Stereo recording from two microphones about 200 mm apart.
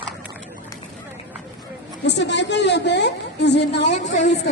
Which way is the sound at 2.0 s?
60° left (ahead or behind).